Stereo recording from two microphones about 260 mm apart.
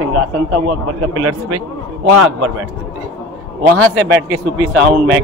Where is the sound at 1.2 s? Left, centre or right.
Right.